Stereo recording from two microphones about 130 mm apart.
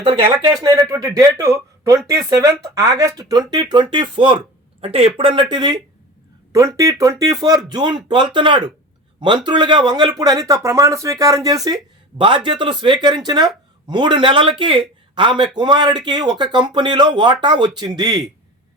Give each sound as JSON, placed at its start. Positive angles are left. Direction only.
{"t": 0.0, "sound": "speech", "side_deg": -45}
{"t": 0.4, "sound": "speech", "side_deg": -30}
{"t": 6.5, "sound": "speech", "side_deg": -25}